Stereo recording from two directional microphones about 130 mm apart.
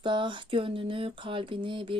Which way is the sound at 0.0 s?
40° right (ahead or behind).